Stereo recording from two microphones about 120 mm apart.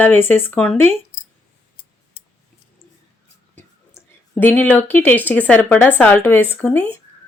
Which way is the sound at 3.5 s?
20° left (ahead or behind).